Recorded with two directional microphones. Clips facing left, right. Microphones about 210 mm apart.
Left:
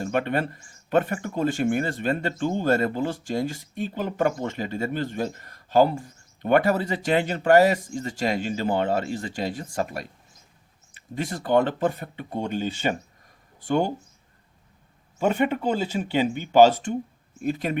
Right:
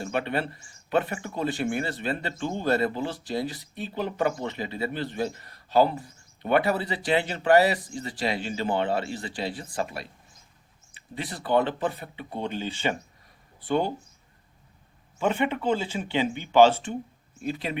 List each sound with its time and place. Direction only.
0.0 s speech: 45° left (ahead or behind)
15.2 s speech: 40° left (ahead or behind)